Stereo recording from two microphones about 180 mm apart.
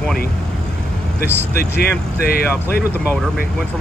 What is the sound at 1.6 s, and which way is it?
Speech, 60° left (ahead or behind).